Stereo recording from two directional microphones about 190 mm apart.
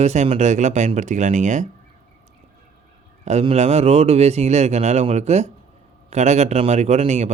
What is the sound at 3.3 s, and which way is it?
Speech, 35° right (ahead or behind).